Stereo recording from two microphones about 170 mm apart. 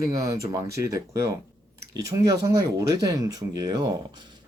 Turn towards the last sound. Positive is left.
turn(degrees=-25)  # may be behind; listen again after turning